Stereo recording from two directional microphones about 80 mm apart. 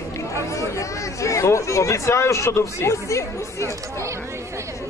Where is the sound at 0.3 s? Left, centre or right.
Left.